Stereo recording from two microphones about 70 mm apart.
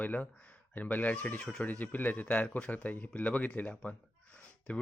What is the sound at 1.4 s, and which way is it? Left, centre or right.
Speech, centre.